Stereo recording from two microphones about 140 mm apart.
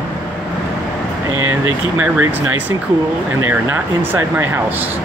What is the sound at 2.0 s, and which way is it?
Speech, 10° right (ahead or behind).